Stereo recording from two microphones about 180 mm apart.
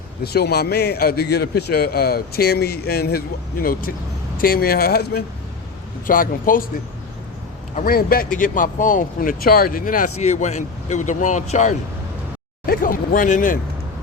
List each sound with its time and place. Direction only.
0.3 s a man's voice: 60° left (ahead or behind)
7.8 s speech: 55° left (ahead or behind)
12.6 s speech: 55° left (ahead or behind)